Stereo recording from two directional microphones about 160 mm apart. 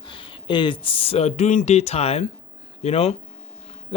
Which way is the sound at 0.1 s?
30° left (ahead or behind).